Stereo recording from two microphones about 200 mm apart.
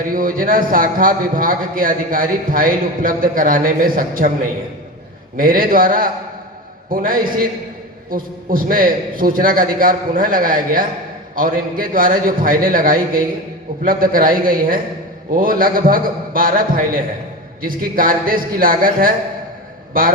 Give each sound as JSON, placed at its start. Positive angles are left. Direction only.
{"t": 0.1, "sound": "a man's voice", "side_deg": -45}
{"t": 5.4, "sound": "a man's voice", "side_deg": -45}